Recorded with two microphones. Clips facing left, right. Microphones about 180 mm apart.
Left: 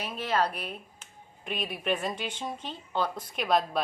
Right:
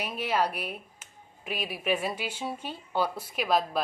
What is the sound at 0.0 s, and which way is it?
A woman's voice, 10° right (ahead or behind).